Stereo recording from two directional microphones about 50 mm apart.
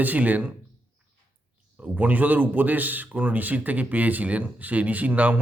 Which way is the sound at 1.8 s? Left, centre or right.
Right.